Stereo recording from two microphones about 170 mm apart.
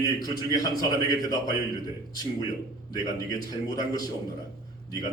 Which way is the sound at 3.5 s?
25° left (ahead or behind).